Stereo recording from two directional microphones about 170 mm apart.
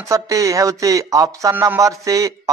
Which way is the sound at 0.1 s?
20° right (ahead or behind).